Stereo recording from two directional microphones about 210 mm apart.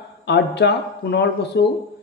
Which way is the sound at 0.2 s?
55° left (ahead or behind).